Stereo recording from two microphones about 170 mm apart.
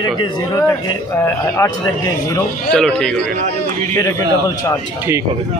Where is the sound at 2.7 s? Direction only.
5° left (ahead or behind).